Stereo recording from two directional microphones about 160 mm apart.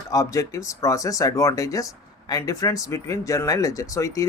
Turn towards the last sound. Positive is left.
turn(degrees=20)  # may be behind; listen again after turning